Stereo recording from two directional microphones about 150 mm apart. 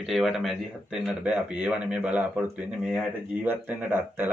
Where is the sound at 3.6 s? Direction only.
15° right (ahead or behind).